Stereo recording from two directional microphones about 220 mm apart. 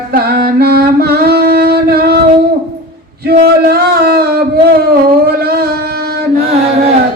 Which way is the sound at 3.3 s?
45° right (ahead or behind).